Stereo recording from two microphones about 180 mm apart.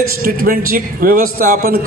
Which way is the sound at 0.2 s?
55° right (ahead or behind).